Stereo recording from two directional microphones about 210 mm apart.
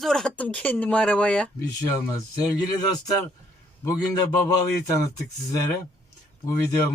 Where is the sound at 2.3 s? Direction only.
20° left (ahead or behind).